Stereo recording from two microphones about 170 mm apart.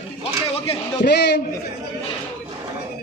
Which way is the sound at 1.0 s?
80° left.